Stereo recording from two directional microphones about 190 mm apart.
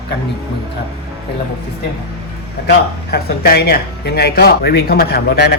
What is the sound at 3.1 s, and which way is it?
Speech, 55° left (ahead or behind).